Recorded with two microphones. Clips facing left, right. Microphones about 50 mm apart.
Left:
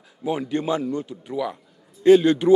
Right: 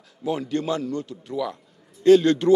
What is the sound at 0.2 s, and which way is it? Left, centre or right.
A man's voice, centre.